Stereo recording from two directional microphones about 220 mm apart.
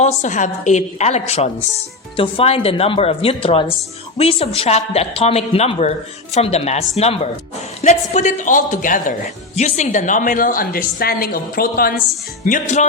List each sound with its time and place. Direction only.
0.0 s a woman's voice: 30° left (ahead or behind)